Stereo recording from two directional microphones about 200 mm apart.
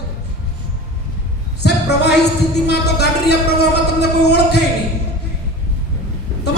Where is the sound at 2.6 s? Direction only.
55° left (ahead or behind).